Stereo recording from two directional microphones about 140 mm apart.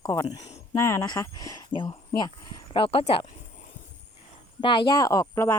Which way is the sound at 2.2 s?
30° left (ahead or behind).